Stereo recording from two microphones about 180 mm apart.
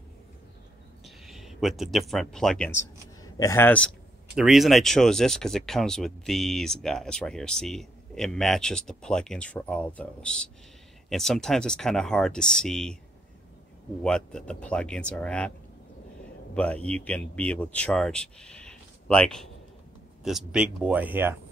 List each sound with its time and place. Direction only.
1.0 s speech: centre (ahead or behind)
3.2 s speech: 20° left (ahead or behind)
4.4 s speech: centre (ahead or behind)
14.0 s speech: 5° left (ahead or behind)
16.5 s speech: 5° left (ahead or behind); by 21.4 s 10° right (ahead or behind)